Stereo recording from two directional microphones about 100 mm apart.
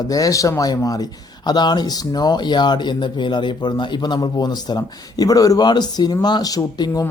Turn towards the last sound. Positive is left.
turn(degrees=40)  # may be behind; listen again after turning